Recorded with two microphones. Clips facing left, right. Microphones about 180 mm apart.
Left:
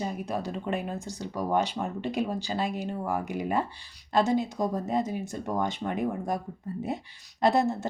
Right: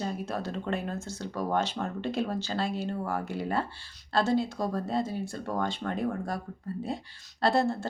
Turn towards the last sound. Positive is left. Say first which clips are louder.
# left 2 dB
turn(degrees=20)  # may be behind; listen again after turning